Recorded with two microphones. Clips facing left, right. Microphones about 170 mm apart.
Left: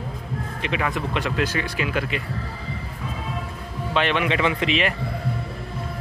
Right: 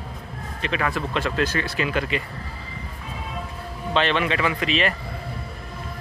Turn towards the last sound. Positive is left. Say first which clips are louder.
# left 1 dB
turn(degrees=20)  # may be behind; listen again after turning